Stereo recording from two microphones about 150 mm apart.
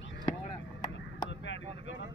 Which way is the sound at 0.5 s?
30° left (ahead or behind).